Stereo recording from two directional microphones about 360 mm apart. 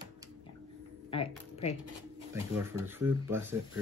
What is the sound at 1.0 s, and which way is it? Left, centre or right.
Speech, centre.